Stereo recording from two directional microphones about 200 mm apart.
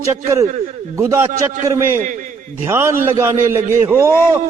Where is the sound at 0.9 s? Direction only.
15° right (ahead or behind).